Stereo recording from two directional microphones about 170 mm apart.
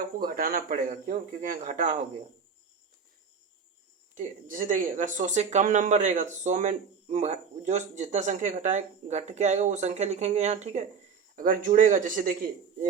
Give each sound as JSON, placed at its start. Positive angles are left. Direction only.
{"t": 0.2, "sound": "speech", "side_deg": -55}
{"t": 4.1, "sound": "speech", "side_deg": -50}
{"t": 11.3, "sound": "speech", "side_deg": -50}